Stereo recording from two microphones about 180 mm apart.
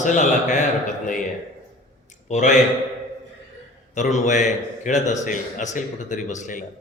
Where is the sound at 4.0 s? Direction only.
40° left (ahead or behind).